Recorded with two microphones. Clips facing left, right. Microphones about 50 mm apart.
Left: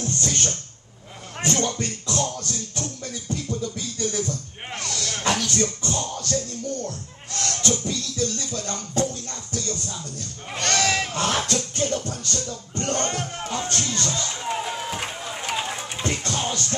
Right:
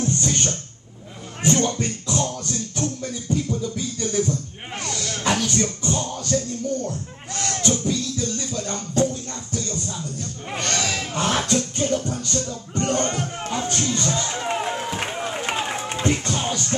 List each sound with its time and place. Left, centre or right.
0.0 s music: right
1.4 s speech: centre
1.7 s music: right
5.2 s speech: right
8.9 s music: centre
10.5 s a sound: centre
11.1 s music: centre
12.4 s speech: right
16.0 s music: right